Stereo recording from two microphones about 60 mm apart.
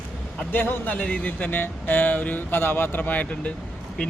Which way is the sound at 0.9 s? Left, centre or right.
Left.